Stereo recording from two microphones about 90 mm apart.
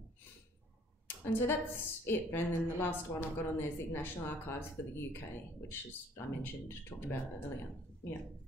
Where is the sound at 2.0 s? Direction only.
25° left (ahead or behind).